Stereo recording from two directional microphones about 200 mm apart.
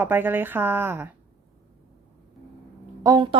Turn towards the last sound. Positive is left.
turn(degrees=-20)  # may be behind; listen again after turning